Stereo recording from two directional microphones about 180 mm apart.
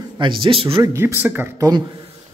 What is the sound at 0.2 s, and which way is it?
Speech, 30° right (ahead or behind).